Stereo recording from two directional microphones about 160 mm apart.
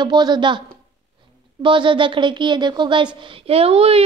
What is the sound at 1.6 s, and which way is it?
A woman's voice, 30° right (ahead or behind).